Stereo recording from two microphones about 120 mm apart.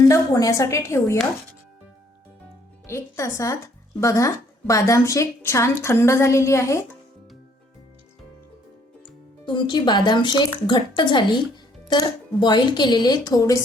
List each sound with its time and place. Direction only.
0.1 s speech: 25° left (ahead or behind)
2.8 s speech: 25° left (ahead or behind)
9.6 s a woman's voice: 40° left (ahead or behind)